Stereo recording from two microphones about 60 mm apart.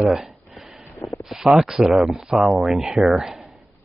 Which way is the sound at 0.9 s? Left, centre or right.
Left.